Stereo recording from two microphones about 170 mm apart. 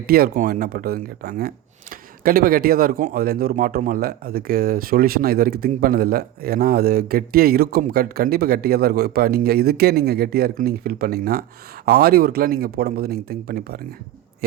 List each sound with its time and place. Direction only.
0.0 s speech: 65° right (ahead or behind)